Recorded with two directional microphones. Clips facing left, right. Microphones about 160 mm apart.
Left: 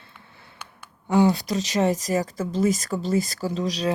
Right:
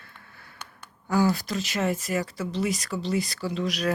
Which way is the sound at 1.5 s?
35° left (ahead or behind).